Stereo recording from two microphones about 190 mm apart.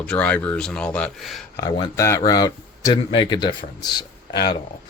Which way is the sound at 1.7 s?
20° left (ahead or behind).